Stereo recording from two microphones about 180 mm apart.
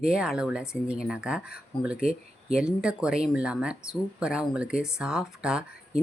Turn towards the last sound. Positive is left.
turn(degrees=-5)  # may be behind; listen again after turning